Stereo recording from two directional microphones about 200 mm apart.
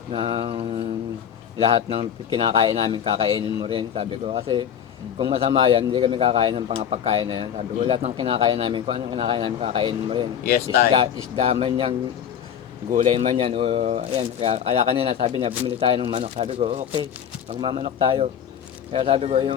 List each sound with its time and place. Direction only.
0.1 s a man's voice: 25° right (ahead or behind)